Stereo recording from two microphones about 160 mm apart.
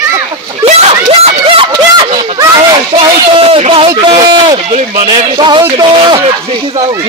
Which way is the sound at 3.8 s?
25° right (ahead or behind).